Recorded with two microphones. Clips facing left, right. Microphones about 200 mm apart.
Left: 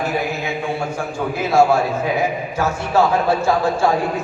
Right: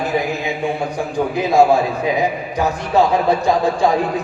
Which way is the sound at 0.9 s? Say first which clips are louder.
Right 3 dB; 15° right (ahead or behind).